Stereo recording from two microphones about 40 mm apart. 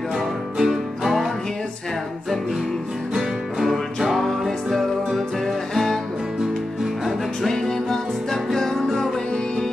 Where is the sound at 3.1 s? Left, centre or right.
Centre.